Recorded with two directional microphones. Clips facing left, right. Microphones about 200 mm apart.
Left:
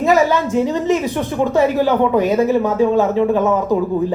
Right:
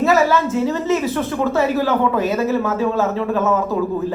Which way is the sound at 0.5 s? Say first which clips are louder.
Left 2 dB; 15° left (ahead or behind).